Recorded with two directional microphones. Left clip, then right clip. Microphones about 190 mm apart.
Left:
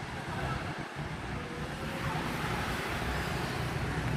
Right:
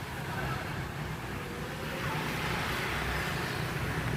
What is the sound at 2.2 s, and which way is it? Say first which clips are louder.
Vehicle: right 1 dB; 55° left (ahead or behind).